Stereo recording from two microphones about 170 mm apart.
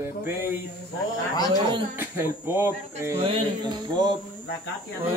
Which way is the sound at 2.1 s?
10° right (ahead or behind).